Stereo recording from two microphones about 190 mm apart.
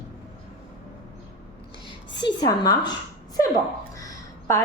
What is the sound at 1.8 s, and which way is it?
A woman's voice, 25° left (ahead or behind).